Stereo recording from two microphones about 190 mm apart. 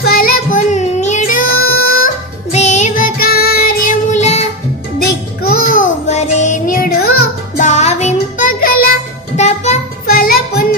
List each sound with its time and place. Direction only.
0.0 s child singing: 50° left (ahead or behind)
2.5 s child singing: 35° left (ahead or behind)
5.0 s music: 50° left (ahead or behind)
7.7 s child singing: 35° left (ahead or behind)
9.3 s music: 35° left (ahead or behind)
10.1 s music: 50° left (ahead or behind)